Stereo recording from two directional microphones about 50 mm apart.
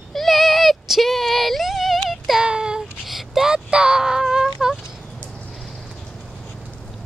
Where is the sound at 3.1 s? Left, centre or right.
Centre.